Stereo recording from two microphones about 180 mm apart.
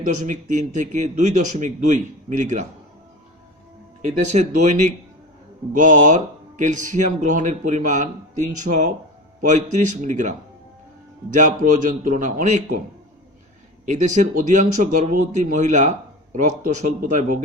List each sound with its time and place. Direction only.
0.2 s a man's voice: 45° right (ahead or behind)
4.3 s a man's voice: 40° right (ahead or behind)
8.7 s speech: 60° right (ahead or behind)
9.4 s a man's voice: 40° right (ahead or behind)
11.3 s a man's voice: 45° right (ahead or behind)
13.8 s a man's voice: 45° right (ahead or behind)